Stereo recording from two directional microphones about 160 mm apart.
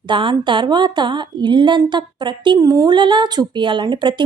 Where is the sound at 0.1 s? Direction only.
30° right (ahead or behind).